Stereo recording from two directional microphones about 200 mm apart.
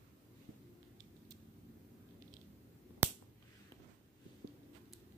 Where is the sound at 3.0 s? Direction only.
10° right (ahead or behind).